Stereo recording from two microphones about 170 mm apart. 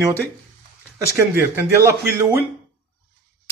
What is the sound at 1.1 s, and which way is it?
Speech, 15° right (ahead or behind).